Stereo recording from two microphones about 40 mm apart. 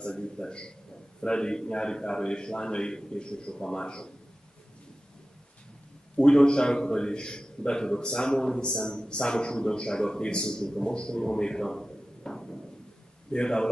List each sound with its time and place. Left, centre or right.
0.0 s a man's voice: left
6.1 s a man's voice: left
12.2 s a sound: centre
13.3 s a man's voice: left